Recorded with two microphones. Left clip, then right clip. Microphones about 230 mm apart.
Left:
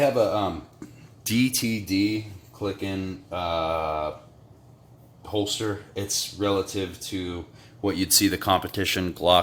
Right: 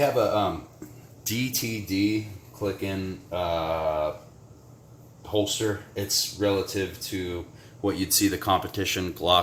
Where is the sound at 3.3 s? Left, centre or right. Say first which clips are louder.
Even; left.